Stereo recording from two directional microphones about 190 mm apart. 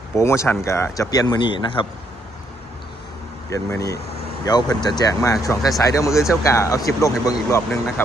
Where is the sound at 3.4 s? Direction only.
15° left (ahead or behind).